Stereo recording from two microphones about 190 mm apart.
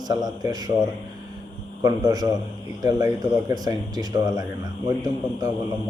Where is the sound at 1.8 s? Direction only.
20° right (ahead or behind).